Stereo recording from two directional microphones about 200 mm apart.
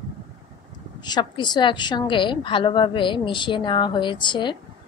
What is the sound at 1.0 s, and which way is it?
A woman's voice, 20° left (ahead or behind).